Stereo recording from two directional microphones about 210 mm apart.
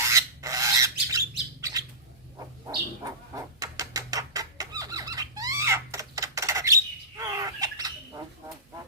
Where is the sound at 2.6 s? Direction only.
15° right (ahead or behind).